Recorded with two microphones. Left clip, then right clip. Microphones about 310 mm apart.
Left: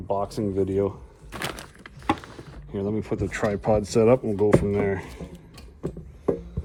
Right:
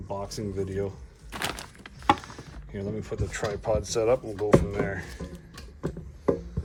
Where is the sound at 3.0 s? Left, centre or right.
Centre.